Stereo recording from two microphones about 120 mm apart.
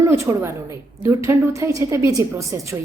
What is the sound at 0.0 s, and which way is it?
A woman's voice, 25° right (ahead or behind).